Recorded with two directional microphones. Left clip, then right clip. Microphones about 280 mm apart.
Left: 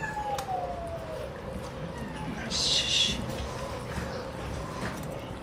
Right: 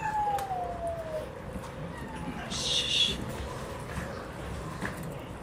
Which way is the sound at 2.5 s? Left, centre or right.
Centre.